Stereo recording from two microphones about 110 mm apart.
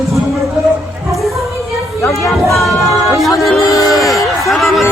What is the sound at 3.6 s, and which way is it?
Music, 30° left (ahead or behind).